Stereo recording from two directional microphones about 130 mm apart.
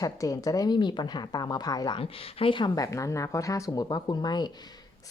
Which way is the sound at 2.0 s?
45° left (ahead or behind).